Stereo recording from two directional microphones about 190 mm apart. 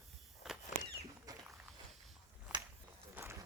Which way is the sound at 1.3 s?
20° right (ahead or behind).